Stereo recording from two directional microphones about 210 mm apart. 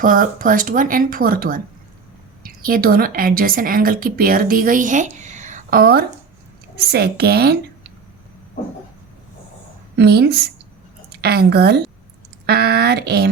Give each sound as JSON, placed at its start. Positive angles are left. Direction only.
{"t": 0.0, "sound": "a woman's voice", "side_deg": -40}
{"t": 10.0, "sound": "a woman's voice", "side_deg": -50}